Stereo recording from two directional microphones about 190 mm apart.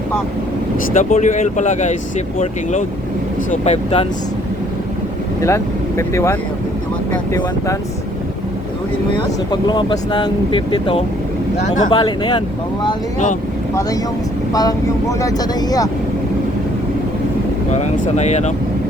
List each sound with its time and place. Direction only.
0.9 s speech: 40° left (ahead or behind)
3.5 s speech: 35° left (ahead or behind)
5.4 s speech: 15° left (ahead or behind)
9.5 s speech: 25° left (ahead or behind)
11.5 s speech: 40° left (ahead or behind)
11.9 s speech: 25° left (ahead or behind)
14.5 s speech: 20° left (ahead or behind)
17.7 s speech: 35° left (ahead or behind)